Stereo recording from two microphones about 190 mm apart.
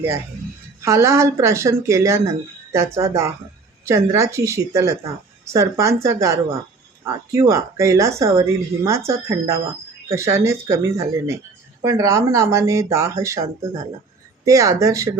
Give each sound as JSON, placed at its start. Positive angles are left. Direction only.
{"t": 0.8, "sound": "speech", "side_deg": -15}